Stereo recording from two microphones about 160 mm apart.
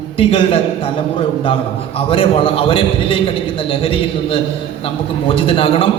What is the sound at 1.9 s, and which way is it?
A man's voice, 35° left (ahead or behind).